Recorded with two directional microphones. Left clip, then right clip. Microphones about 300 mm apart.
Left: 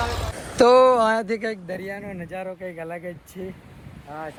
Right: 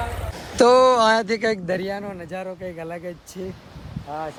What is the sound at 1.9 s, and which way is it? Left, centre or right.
Speech, centre.